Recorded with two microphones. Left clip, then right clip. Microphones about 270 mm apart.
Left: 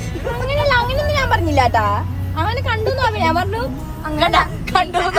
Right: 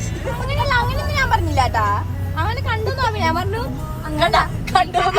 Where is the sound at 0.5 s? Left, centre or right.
Left.